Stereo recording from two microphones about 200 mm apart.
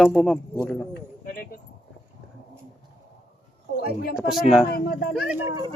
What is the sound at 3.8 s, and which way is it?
Speech, 50° left (ahead or behind).